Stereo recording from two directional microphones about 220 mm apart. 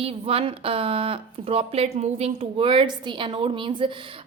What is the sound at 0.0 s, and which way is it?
Speech, 25° right (ahead or behind).